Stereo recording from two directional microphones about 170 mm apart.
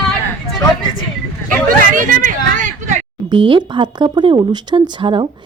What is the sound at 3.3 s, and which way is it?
Speech, 30° right (ahead or behind).